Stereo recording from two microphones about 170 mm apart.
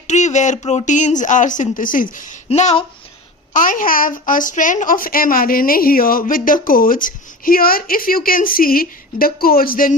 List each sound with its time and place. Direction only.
0.1 s speech: 45° left (ahead or behind)
3.5 s a woman's voice: 50° left (ahead or behind)